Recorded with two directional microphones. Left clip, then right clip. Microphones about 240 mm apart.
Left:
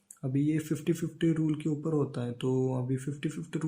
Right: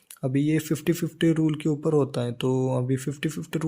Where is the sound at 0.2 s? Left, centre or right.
Right.